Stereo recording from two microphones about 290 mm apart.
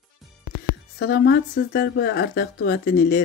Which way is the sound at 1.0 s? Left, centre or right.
Left.